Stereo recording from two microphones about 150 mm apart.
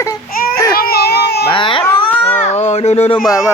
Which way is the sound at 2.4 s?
45° left (ahead or behind).